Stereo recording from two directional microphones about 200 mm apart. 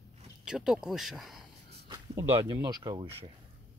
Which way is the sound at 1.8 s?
20° right (ahead or behind).